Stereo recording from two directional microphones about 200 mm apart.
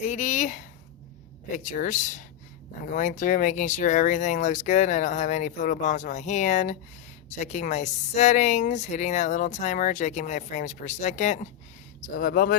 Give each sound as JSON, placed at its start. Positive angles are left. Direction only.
{"t": 0.0, "sound": "a woman's voice", "side_deg": 35}